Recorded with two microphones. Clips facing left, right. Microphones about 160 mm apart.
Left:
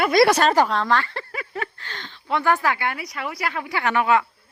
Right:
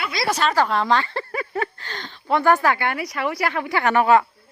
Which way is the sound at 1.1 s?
35° right (ahead or behind).